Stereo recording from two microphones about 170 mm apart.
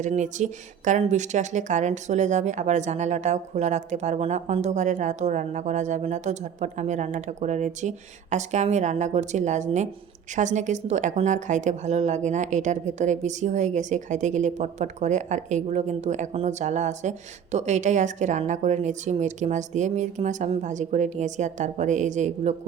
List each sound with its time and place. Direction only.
0.0 s a woman's voice: 45° right (ahead or behind)